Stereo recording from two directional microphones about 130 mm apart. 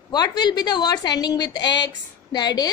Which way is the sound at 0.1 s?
30° left (ahead or behind).